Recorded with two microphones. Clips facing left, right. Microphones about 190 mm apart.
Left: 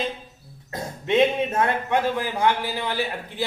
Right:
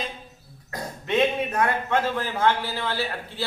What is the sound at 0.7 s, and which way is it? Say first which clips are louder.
A man's voice: left 3 dB; 25° left (ahead or behind).